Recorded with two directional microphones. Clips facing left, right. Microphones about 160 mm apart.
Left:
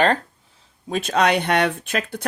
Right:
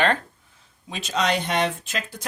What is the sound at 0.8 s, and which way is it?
Speech, 50° left (ahead or behind).